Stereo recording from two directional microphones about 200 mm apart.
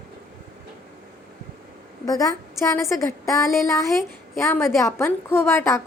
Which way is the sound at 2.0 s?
15° left (ahead or behind).